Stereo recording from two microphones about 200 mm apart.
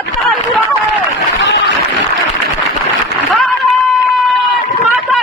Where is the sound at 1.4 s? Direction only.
65° left (ahead or behind).